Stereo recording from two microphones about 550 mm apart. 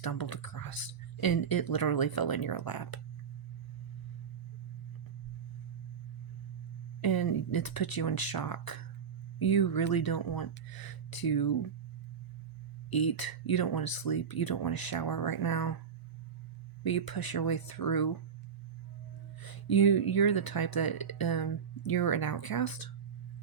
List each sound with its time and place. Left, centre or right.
0.0 s speech: left
7.0 s speech: left
12.9 s speech: left
16.8 s speech: left
19.4 s speech: left